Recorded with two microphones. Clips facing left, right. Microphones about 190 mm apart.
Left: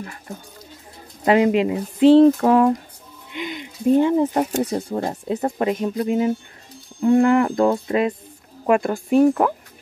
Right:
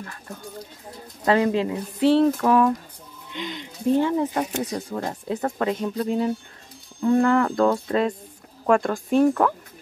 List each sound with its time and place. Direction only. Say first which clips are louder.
0.0 s music: left 2 dB; 15° left (ahead or behind)
2.2 s speech: left 4 dB; 30° left (ahead or behind)
3.3 s speech: left 3 dB; 10° left (ahead or behind); by 5.1 s 30° left (ahead or behind)
5.3 s music: left 3 dB; 20° left (ahead or behind)